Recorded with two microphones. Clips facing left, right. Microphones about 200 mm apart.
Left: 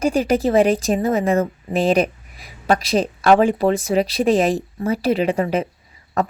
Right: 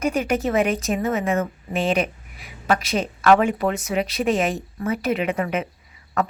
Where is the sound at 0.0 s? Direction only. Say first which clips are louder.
Left 4 dB; 30° left (ahead or behind).